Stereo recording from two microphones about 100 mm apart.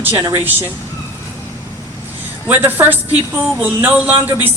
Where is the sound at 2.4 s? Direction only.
20° right (ahead or behind).